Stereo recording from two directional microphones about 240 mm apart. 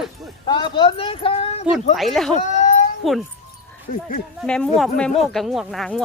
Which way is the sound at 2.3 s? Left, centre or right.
Left.